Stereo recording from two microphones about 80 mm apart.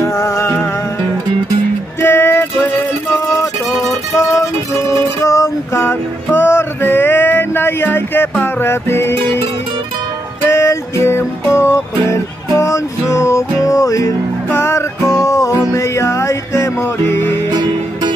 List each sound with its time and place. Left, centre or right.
0.0 s music: left
2.0 s music: left
10.4 s music: left
17.5 s music: right